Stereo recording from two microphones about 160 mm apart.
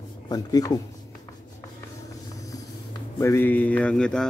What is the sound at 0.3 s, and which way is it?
Speech, 25° left (ahead or behind).